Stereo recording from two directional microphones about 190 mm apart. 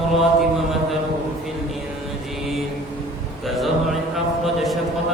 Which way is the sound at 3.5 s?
Centre (ahead or behind).